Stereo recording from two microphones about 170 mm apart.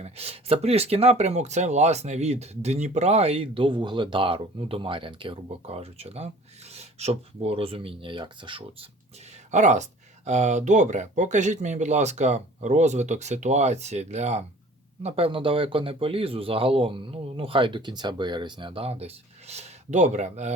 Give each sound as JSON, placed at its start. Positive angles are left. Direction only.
{"t": 0.0, "sound": "speech", "side_deg": -35}
{"t": 9.5, "sound": "speech", "side_deg": -45}